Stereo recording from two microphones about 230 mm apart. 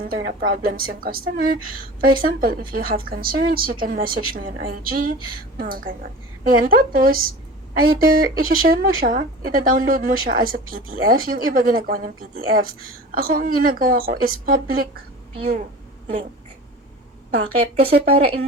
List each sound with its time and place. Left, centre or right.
0.1 s speech: right
17.3 s a woman's voice: right